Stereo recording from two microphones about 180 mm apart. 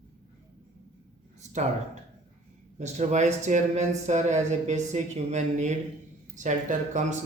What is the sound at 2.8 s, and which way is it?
Speech, 40° right (ahead or behind).